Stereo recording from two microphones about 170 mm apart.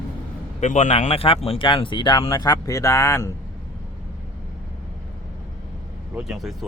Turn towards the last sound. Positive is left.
turn(degrees=0)  # may be behind; listen again after turning